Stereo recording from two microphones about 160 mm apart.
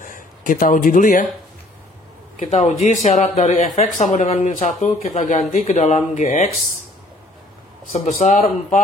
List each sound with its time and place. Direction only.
0.0 s speech: 55° left (ahead or behind)
2.3 s speech: 55° left (ahead or behind)
7.9 s speech: 45° left (ahead or behind)